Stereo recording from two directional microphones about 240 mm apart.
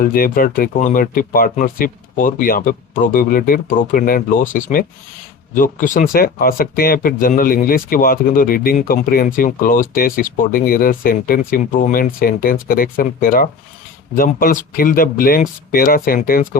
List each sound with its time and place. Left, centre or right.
0.0 s speech: left